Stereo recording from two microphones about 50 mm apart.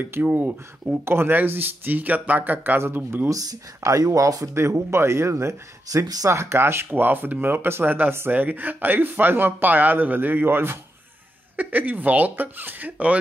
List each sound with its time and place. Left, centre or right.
0.2 s speech: right
0.9 s speech: right
3.8 s speech: right
6.9 s speech: right
7.4 s speech: right
8.3 s speech: right
11.5 s speech: right